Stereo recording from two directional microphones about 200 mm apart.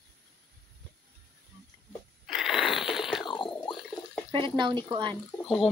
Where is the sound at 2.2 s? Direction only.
Centre (ahead or behind).